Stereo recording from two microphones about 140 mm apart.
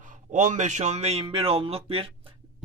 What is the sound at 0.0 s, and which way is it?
A man's voice, 65° right (ahead or behind).